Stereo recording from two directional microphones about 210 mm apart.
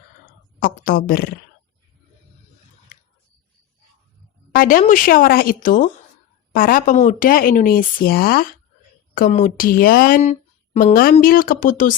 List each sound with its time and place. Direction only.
0.6 s speech: 40° left (ahead or behind)
4.5 s a woman's voice: 40° left (ahead or behind)